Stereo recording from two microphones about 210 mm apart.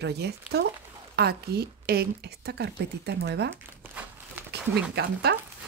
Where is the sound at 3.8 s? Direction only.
10° right (ahead or behind).